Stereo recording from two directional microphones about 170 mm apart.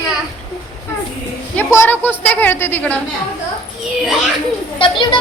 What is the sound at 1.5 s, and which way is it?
A woman's voice, 15° left (ahead or behind).